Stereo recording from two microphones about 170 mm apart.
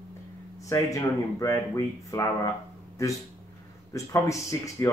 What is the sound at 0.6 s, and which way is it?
Speech, 20° left (ahead or behind).